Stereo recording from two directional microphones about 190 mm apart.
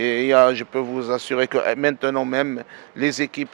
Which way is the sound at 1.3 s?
10° right (ahead or behind).